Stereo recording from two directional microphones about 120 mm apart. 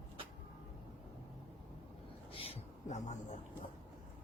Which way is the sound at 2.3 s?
50° left (ahead or behind).